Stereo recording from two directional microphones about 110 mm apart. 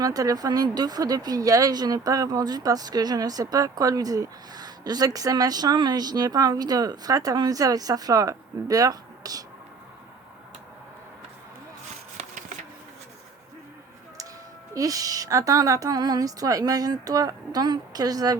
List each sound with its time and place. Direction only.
0.0 s speech: 35° right (ahead or behind)
14.7 s speech: 30° right (ahead or behind)